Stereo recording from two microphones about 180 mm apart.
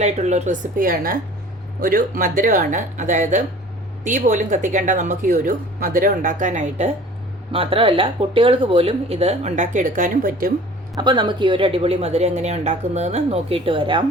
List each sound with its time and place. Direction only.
0.0 s a woman's voice: 40° right (ahead or behind)
10.9 s a woman's voice: 25° right (ahead or behind)